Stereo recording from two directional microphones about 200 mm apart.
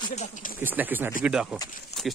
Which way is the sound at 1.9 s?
30° left (ahead or behind).